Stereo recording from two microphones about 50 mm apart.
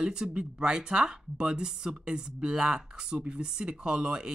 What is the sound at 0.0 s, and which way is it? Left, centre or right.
Speech, centre.